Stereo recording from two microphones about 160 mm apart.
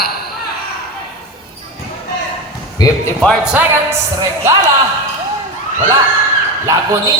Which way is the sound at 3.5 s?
20° right (ahead or behind).